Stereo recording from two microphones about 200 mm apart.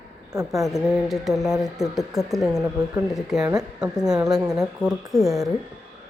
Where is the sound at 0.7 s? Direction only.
Centre (ahead or behind).